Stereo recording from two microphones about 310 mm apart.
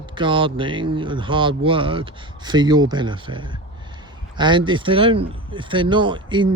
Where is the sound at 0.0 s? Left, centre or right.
Centre.